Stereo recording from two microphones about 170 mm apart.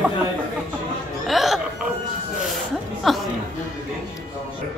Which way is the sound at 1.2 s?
Centre (ahead or behind).